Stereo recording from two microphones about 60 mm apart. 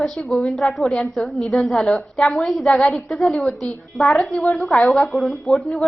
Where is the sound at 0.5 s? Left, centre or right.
Centre.